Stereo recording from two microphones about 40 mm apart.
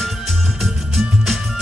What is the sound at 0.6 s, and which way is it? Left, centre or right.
Music, centre.